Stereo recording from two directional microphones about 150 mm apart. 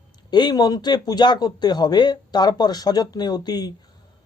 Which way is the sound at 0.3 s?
30° left (ahead or behind).